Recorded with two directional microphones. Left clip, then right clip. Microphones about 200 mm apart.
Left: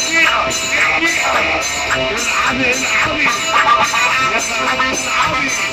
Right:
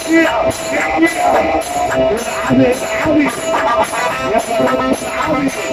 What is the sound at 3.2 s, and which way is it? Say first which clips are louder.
Music: left 2 dB; 35° right (ahead or behind).